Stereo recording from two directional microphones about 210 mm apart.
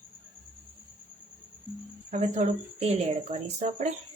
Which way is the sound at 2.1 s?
35° right (ahead or behind).